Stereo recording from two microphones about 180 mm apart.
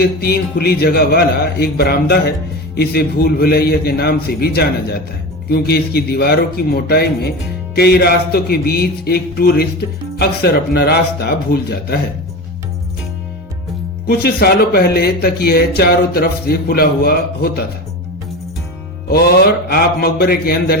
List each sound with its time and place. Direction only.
0.0 s speech: 60° left (ahead or behind)
14.1 s speech: 60° left (ahead or behind)
19.0 s speech: 60° left (ahead or behind)